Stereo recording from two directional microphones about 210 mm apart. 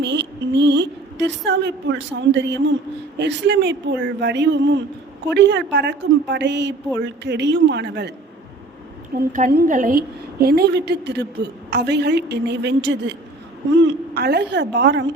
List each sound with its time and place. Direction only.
0.0 s a sound: 55° right (ahead or behind)
9.1 s a woman's voice: 35° right (ahead or behind)
9.5 s a woman's voice: 50° right (ahead or behind)
9.7 s a woman's voice: 40° right (ahead or behind)